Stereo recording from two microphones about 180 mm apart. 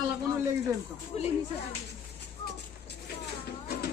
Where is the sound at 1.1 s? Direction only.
35° left (ahead or behind).